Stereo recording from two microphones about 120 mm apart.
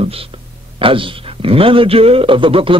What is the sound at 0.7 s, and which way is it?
A man's voice, 45° right (ahead or behind).